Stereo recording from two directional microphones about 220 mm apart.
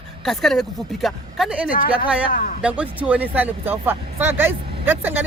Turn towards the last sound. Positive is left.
turn(degrees=-10)  # may be behind; listen again after turning